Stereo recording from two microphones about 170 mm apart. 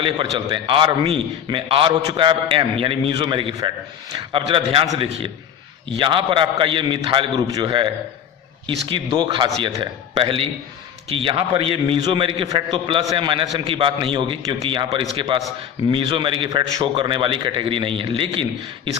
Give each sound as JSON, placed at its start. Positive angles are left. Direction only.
{"t": 0.0, "sound": "a man's voice", "side_deg": -30}
{"t": 5.9, "sound": "a man's voice", "side_deg": -30}